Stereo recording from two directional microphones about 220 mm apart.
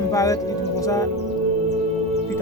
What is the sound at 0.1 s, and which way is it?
A man's voice, 15° left (ahead or behind).